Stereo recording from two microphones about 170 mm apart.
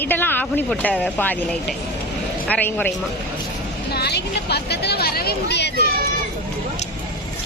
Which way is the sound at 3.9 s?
70° left (ahead or behind).